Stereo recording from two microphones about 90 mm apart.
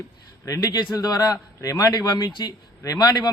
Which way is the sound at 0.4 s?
40° left (ahead or behind).